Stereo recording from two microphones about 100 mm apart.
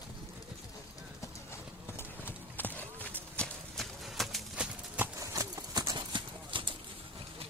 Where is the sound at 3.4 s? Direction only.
Centre (ahead or behind).